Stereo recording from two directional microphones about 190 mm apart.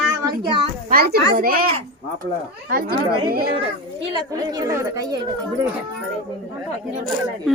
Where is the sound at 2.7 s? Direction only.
50° right (ahead or behind).